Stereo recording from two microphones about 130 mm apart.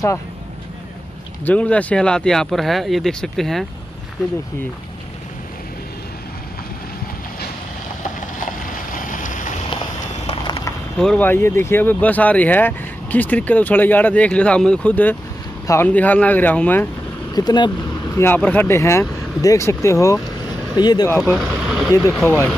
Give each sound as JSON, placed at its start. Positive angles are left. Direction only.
{"t": 1.4, "sound": "speech", "side_deg": 10}
{"t": 8.9, "sound": "vehicle", "side_deg": 90}
{"t": 10.4, "sound": "a sound", "side_deg": 35}
{"t": 11.0, "sound": "speech", "side_deg": 5}
{"t": 11.2, "sound": "speech", "side_deg": 20}
{"t": 15.6, "sound": "speech", "side_deg": 25}
{"t": 15.9, "sound": "speech", "side_deg": 10}
{"t": 17.3, "sound": "speech", "side_deg": 30}
{"t": 21.2, "sound": "speech", "side_deg": 0}